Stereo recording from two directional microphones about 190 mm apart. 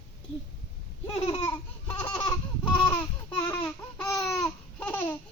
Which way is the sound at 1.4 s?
15° left (ahead or behind).